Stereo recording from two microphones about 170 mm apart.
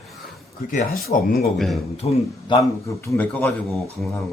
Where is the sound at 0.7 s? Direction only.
50° left (ahead or behind).